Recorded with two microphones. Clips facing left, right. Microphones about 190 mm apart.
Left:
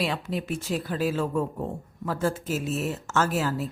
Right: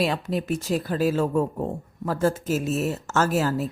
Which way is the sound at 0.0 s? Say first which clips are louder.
Right 4 dB; 40° right (ahead or behind).